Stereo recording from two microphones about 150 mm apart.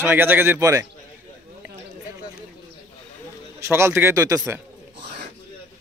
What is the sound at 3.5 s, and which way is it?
Speech, 20° right (ahead or behind).